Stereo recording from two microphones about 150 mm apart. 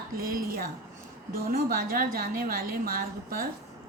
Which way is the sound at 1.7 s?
70° right (ahead or behind).